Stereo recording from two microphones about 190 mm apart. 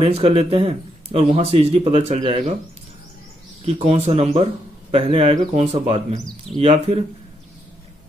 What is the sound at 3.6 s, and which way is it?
Speech, 30° right (ahead or behind).